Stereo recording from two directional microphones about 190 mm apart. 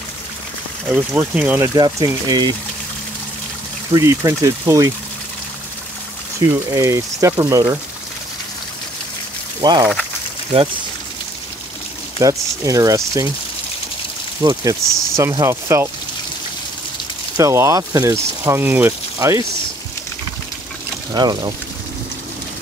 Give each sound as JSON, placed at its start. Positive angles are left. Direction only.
{"t": 0.8, "sound": "speech", "side_deg": -10}
{"t": 3.9, "sound": "speech", "side_deg": -15}
{"t": 6.4, "sound": "speech", "side_deg": -15}
{"t": 9.6, "sound": "speech", "side_deg": -20}
{"t": 12.2, "sound": "speech", "side_deg": -20}
{"t": 14.4, "sound": "speech", "side_deg": -20}
{"t": 17.4, "sound": "speech", "side_deg": -15}
{"t": 21.1, "sound": "speech", "side_deg": -20}